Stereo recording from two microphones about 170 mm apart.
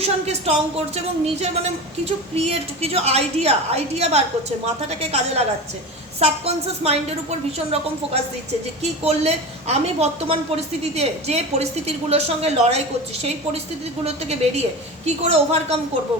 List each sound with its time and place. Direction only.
0.0 s a woman's voice: 35° right (ahead or behind)
2.0 s a woman's voice: 35° right (ahead or behind)
14.0 s a woman's voice: 40° right (ahead or behind)